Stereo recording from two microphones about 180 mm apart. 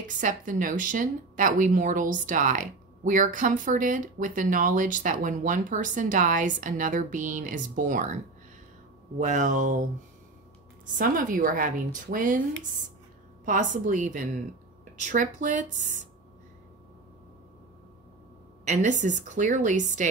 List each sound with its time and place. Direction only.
0.0 s speech: 45° right (ahead or behind)
9.2 s speech: 45° right (ahead or behind)
11.0 s speech: 50° right (ahead or behind)
13.5 s speech: 45° right (ahead or behind)
18.7 s speech: 40° right (ahead or behind)